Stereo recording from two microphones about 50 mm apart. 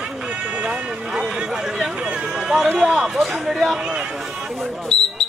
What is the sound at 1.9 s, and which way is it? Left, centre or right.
Run, centre.